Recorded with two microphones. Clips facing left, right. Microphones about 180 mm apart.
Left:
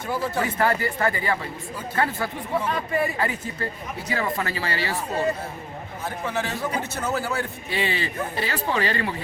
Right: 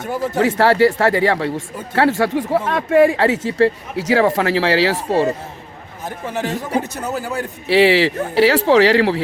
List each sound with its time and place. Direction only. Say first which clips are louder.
0.3 s speech: right 11 dB; 80° right
6.2 s a man's voice: right 5 dB; 15° right (ahead or behind)
7.7 s speech: right 16 dB; 90° right